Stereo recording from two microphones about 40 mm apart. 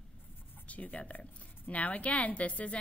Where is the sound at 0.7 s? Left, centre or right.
Left.